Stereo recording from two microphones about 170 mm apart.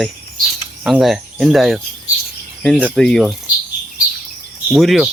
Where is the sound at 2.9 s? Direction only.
5° left (ahead or behind).